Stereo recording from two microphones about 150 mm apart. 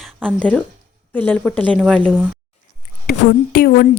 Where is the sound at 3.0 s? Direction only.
90° left.